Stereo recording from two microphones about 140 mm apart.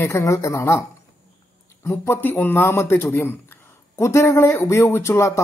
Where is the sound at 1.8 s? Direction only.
20° left (ahead or behind).